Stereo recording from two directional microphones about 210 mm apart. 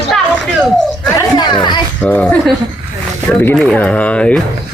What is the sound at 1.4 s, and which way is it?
Speech, 20° left (ahead or behind).